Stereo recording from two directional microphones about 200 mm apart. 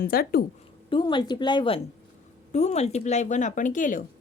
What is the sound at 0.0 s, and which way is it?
Speech, 50° left (ahead or behind).